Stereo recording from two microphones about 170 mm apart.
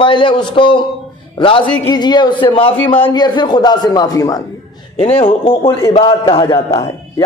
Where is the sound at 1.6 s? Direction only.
10° left (ahead or behind).